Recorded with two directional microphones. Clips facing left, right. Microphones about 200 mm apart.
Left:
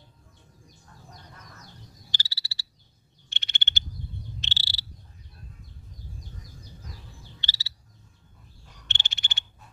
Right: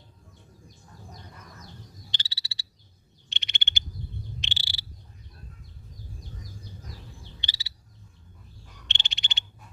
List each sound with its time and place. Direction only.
2.0 s frog: 20° right (ahead or behind)
7.3 s frog: 15° right (ahead or behind)
8.8 s frog: 15° right (ahead or behind)